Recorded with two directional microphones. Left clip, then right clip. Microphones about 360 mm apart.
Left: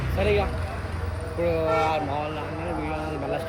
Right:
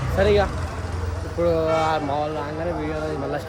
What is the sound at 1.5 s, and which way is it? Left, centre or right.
Speech, centre.